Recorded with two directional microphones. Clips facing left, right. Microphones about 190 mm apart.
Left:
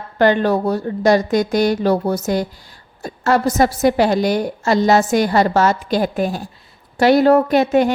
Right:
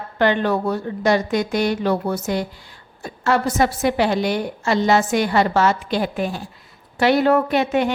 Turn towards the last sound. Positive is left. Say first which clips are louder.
# left 5 dB
turn(degrees=40)  # may be behind; listen again after turning